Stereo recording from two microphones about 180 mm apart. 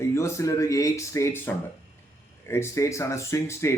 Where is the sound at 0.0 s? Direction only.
15° left (ahead or behind).